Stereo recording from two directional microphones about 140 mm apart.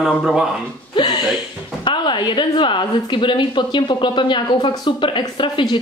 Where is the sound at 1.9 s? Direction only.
35° left (ahead or behind).